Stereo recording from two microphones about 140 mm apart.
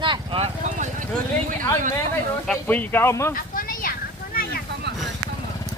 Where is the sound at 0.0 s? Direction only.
40° right (ahead or behind).